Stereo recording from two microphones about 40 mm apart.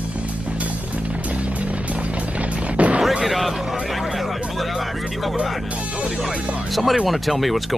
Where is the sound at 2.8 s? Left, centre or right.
Right.